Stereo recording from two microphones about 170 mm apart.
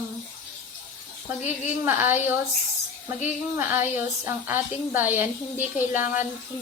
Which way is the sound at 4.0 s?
10° right (ahead or behind).